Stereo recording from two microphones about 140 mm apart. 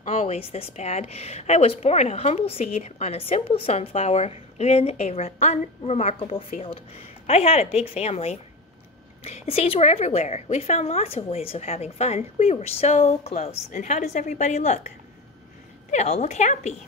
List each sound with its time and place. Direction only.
0.0 s a woman's voice: 50° left (ahead or behind)
15.9 s a woman's voice: 50° left (ahead or behind)